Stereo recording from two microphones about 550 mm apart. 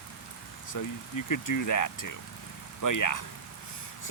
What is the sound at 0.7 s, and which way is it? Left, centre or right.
Speech, left.